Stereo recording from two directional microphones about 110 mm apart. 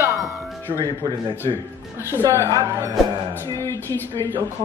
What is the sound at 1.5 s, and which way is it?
Speech, 50° right (ahead or behind).